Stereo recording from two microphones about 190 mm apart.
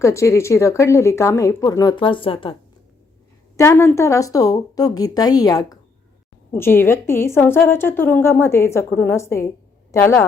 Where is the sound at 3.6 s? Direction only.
15° left (ahead or behind).